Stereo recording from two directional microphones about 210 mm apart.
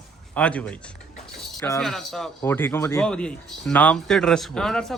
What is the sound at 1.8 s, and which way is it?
Speech, centre (ahead or behind).